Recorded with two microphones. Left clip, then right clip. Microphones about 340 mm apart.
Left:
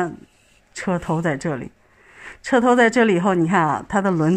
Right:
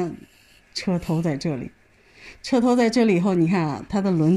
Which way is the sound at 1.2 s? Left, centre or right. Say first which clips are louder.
Left 4 dB; left.